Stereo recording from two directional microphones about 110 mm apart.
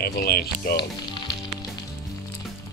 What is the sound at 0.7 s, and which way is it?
Music, 45° left (ahead or behind).